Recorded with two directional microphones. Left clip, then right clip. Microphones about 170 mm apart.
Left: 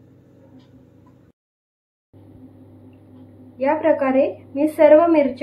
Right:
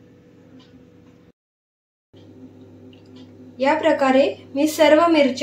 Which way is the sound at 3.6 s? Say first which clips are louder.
Even; 40° right (ahead or behind).